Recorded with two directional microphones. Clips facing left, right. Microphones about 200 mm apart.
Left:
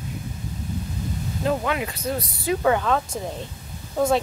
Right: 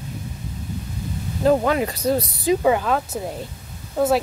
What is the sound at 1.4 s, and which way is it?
Speech, 40° right (ahead or behind).